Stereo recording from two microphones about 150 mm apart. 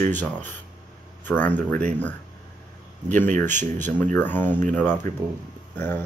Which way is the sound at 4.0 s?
10° left (ahead or behind).